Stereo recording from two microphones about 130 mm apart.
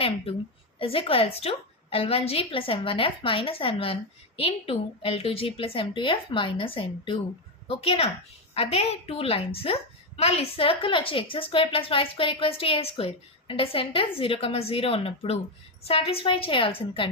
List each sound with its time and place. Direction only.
0.8 s a woman's voice: 45° left (ahead or behind)